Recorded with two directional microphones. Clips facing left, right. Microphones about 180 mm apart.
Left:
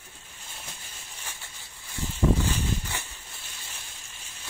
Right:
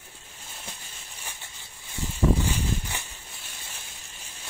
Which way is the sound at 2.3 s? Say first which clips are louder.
Even; 15° right (ahead or behind).